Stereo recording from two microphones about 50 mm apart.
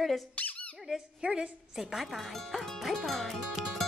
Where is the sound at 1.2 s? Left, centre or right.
Centre.